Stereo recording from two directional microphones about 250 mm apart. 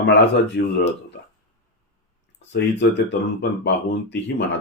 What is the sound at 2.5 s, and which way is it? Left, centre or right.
A man's voice, left.